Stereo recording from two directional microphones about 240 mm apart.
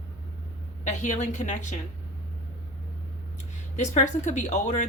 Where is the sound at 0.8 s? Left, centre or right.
Left.